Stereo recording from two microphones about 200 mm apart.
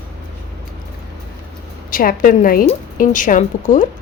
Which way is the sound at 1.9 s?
45° left (ahead or behind).